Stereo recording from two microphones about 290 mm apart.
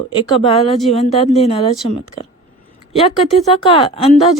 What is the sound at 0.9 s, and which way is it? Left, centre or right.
Speech, left.